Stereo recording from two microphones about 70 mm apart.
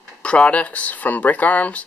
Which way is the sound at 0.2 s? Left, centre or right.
Centre.